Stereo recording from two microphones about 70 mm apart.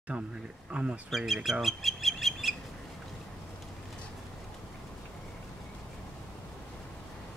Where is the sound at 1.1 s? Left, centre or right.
Centre.